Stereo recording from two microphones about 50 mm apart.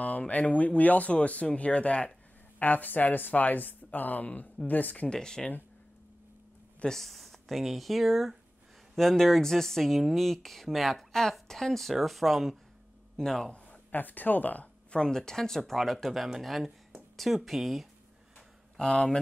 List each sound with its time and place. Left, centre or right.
0.3 s speech: left
2.6 s a woman's voice: left
5.0 s speech: centre
6.9 s speech: centre
13.9 s a woman's voice: left
14.9 s speech: centre
18.8 s speech: left